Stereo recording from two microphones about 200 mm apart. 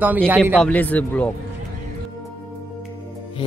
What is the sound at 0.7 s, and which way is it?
Speech, 10° left (ahead or behind).